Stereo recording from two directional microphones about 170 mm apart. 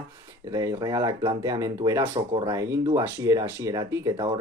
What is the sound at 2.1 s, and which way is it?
Speech, 35° right (ahead or behind).